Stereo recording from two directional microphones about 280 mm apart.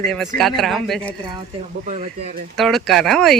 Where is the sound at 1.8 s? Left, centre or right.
Right.